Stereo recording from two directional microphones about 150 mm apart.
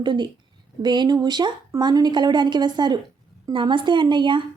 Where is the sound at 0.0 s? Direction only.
30° right (ahead or behind).